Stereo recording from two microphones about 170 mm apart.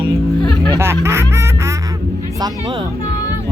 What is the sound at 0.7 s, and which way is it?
Music, 15° right (ahead or behind).